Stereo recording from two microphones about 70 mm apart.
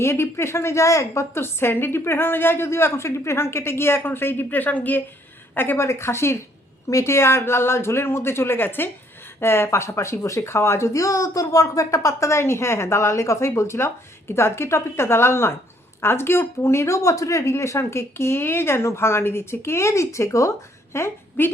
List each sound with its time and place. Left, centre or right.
0.0 s speech: left
20.9 s a woman's voice: left